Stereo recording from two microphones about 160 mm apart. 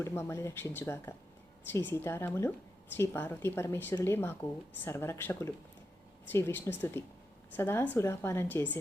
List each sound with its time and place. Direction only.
0.0 s speech: 15° left (ahead or behind)